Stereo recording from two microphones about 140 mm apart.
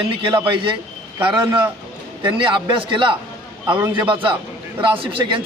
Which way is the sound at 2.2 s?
35° right (ahead or behind).